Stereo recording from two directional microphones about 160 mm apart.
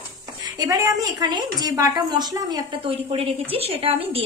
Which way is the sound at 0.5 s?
20° right (ahead or behind).